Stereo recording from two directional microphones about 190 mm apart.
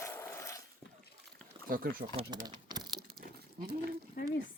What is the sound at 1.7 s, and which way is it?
Speech, 50° right (ahead or behind).